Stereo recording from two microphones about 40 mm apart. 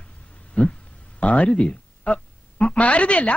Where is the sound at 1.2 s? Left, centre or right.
Left.